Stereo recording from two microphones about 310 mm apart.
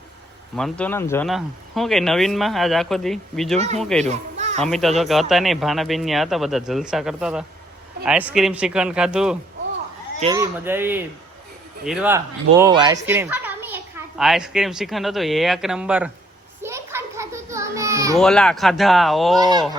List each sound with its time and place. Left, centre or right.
0.5 s a child's voice: centre
4.0 s children playing: right
4.6 s a child's voice: centre
10.2 s a child's voice: centre
16.6 s children playing: centre
18.2 s a child's voice: centre
19.4 s speech: centre